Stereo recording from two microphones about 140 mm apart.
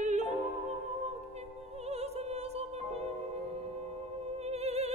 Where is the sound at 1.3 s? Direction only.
50° right (ahead or behind).